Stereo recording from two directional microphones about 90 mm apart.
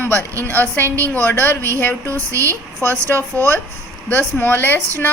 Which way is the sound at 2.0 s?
35° right (ahead or behind).